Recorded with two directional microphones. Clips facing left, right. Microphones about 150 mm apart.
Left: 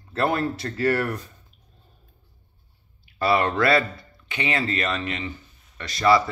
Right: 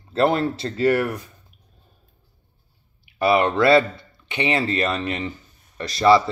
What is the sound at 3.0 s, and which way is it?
A man's voice, 20° right (ahead or behind).